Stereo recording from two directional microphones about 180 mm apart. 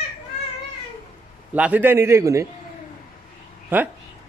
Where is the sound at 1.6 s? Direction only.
10° right (ahead or behind).